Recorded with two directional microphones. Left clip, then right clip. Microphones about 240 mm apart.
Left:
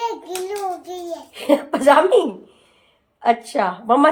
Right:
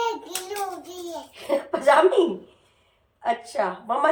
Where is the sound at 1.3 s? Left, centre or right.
Left.